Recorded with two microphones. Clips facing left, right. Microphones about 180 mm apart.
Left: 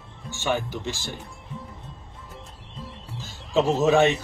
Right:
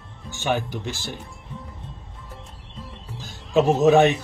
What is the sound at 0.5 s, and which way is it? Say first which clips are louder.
Speech: right 2 dB; 15° right (ahead or behind).